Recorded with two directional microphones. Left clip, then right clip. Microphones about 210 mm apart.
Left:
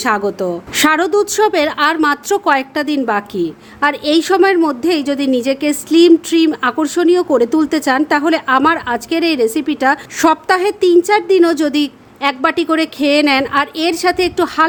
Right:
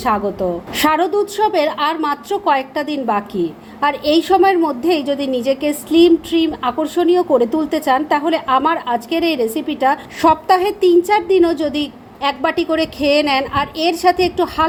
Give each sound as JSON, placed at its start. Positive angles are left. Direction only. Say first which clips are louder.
{"t": 0.0, "sound": "a woman's voice", "louder": "left 2 dB", "side_deg": 30}